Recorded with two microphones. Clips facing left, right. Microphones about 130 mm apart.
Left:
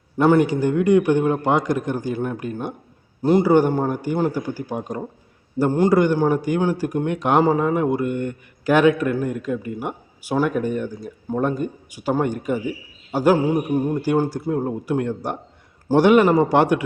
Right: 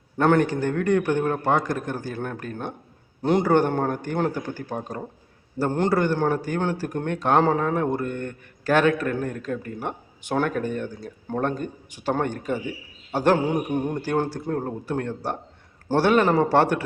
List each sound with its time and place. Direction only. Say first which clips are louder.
0.2 s a man's voice: left 4 dB; 10° left (ahead or behind)